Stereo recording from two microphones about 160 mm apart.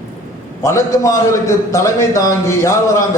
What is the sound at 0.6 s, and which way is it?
A man's voice, 20° left (ahead or behind).